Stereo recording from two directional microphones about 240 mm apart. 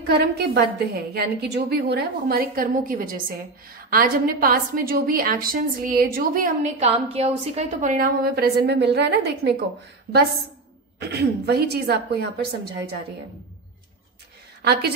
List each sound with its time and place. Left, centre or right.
0.0 s a woman's voice: right
11.0 s speech: right
14.6 s a woman's voice: right